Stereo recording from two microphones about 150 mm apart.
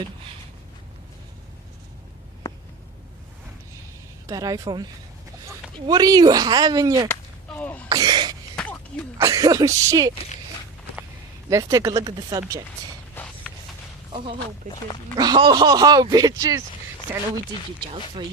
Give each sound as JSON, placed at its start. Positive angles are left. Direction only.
{"t": 4.3, "sound": "speech", "side_deg": -25}
{"t": 7.1, "sound": "whip", "side_deg": 10}
{"t": 7.9, "sound": "speech", "side_deg": -25}
{"t": 8.5, "sound": "a sound", "side_deg": 10}
{"t": 9.1, "sound": "speech", "side_deg": -20}
{"t": 11.4, "sound": "speech", "side_deg": -25}
{"t": 13.1, "sound": "a sound", "side_deg": 5}
{"t": 14.6, "sound": "speech", "side_deg": -60}
{"t": 15.2, "sound": "speech", "side_deg": -30}
{"t": 17.1, "sound": "speech", "side_deg": -15}